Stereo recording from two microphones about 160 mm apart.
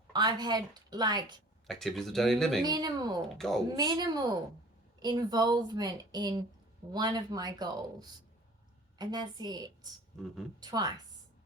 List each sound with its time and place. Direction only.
0.1 s a woman's voice: 25° right (ahead or behind)
1.6 s speech: centre (ahead or behind)
2.6 s a woman's voice: 25° right (ahead or behind)
3.2 s speech: 5° left (ahead or behind)
3.8 s a woman's voice: 25° right (ahead or behind)